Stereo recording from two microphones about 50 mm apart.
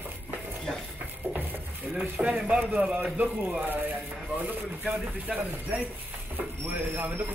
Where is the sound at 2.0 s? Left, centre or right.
Centre.